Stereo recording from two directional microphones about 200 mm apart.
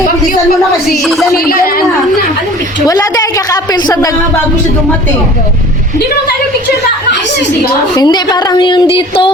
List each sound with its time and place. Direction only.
1.0 s speech: centre (ahead or behind)
1.5 s a man's voice: 45° left (ahead or behind)
2.8 s a woman's voice: 15° left (ahead or behind)
7.9 s speech: 20° left (ahead or behind)